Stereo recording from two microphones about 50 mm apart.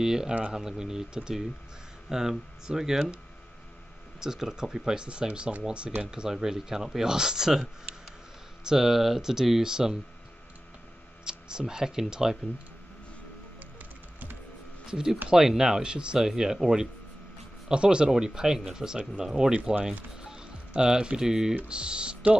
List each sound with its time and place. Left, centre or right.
0.0 s speech: centre
4.2 s speech: centre
11.2 s speech: centre
14.9 s speech: centre